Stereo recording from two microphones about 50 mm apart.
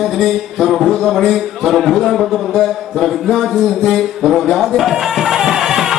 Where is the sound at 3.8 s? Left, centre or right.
Centre.